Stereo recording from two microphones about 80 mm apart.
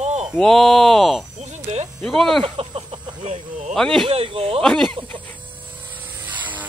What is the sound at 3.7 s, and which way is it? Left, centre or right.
Speech, centre.